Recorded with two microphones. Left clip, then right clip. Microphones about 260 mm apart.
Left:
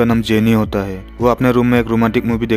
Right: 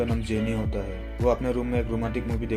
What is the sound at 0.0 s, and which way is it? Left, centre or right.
Speech, left.